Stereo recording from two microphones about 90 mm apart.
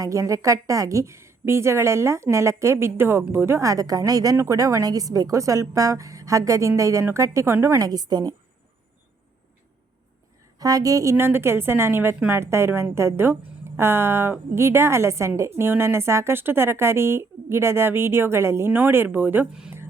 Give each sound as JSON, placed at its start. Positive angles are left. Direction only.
{"t": 0.0, "sound": "a woman's voice", "side_deg": -35}
{"t": 7.8, "sound": "a woman's voice", "side_deg": -50}
{"t": 10.6, "sound": "a woman's voice", "side_deg": -40}